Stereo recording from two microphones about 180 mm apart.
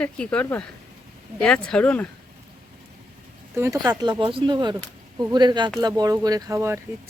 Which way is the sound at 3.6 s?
20° right (ahead or behind).